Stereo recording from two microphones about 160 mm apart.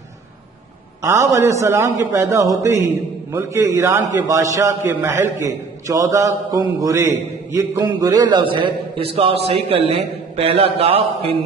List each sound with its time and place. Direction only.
1.0 s a man's voice: 20° right (ahead or behind); by 11.3 s 40° right (ahead or behind)